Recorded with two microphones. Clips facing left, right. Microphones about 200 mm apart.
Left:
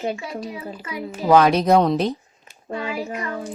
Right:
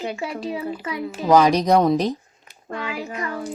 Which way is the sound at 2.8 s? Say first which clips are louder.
Left 2 dB; 20° left (ahead or behind).